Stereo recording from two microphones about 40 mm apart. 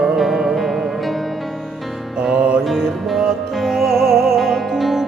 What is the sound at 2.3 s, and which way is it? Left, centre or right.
Music, right.